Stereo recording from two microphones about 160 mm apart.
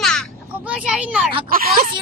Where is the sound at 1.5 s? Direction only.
65° right (ahead or behind).